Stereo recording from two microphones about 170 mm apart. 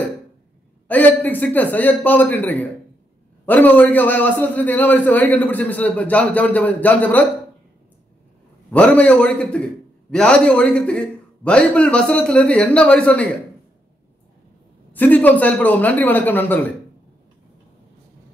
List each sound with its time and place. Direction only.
0.8 s a man's voice: 10° left (ahead or behind)
8.7 s a man's voice: 5° left (ahead or behind)
14.9 s a man's voice: 10° left (ahead or behind)